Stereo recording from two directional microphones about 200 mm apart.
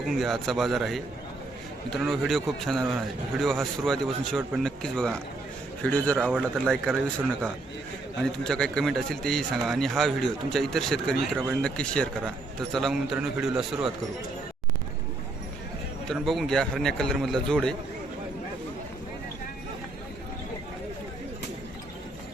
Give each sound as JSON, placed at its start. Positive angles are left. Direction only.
{"t": 0.0, "sound": "a man's voice", "side_deg": 0}
{"t": 8.2, "sound": "a man's voice", "side_deg": 5}
{"t": 16.0, "sound": "a man's voice", "side_deg": 0}